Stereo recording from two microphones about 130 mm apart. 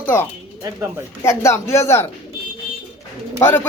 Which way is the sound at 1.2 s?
20° left (ahead or behind).